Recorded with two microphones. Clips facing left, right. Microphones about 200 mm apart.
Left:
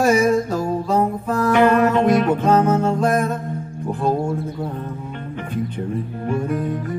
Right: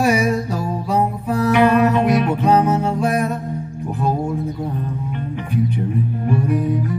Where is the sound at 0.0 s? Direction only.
45° left (ahead or behind).